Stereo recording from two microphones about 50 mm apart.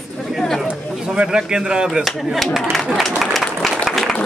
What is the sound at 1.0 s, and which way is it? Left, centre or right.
A man's voice, centre.